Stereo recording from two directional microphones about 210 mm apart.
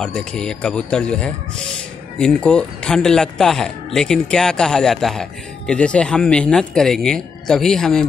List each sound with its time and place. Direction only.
0.0 s speech: 5° left (ahead or behind)